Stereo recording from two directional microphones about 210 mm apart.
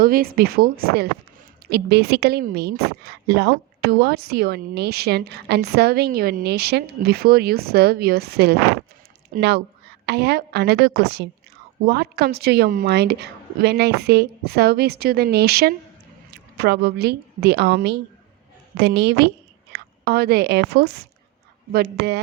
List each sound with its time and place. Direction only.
0.0 s a woman's voice: 45° right (ahead or behind)